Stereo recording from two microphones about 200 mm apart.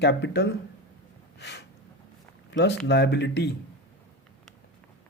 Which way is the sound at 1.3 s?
60° left (ahead or behind).